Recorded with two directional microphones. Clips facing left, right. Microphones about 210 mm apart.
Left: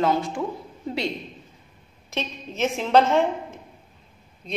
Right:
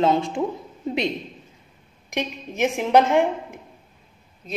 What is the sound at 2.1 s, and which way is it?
A woman's voice, 15° right (ahead or behind).